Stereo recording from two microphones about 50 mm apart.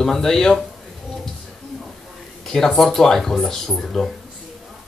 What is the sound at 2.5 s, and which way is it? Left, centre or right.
Speech, centre.